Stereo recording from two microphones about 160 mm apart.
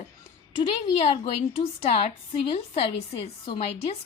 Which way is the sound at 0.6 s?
35° left (ahead or behind).